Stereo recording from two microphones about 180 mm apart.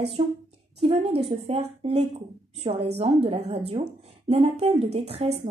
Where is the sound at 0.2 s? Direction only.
30° right (ahead or behind).